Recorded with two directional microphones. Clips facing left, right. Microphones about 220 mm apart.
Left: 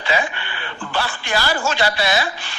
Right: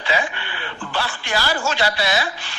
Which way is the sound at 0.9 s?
50° left (ahead or behind).